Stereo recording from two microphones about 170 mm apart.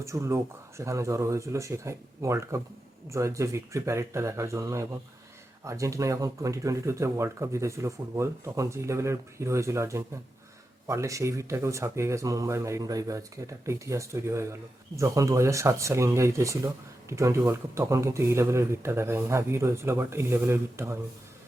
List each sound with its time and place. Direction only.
0.0 s speech: 15° right (ahead or behind)